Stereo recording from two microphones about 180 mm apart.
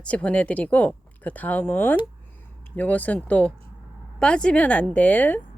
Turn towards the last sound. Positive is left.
turn(degrees=10)  # may be behind; listen again after turning